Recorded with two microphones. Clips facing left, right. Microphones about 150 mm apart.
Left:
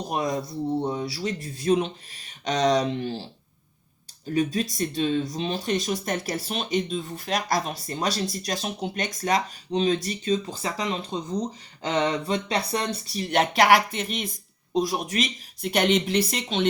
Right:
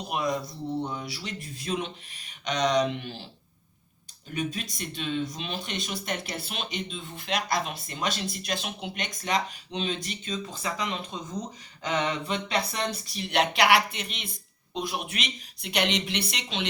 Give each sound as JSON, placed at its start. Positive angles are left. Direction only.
{"t": 0.8, "sound": "speech", "side_deg": 30}
{"t": 4.4, "sound": "speech", "side_deg": 35}